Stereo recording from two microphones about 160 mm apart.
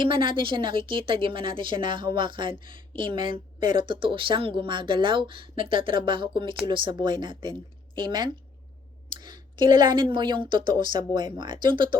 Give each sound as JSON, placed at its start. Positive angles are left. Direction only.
{"t": 0.0, "sound": "a woman's voice", "side_deg": -30}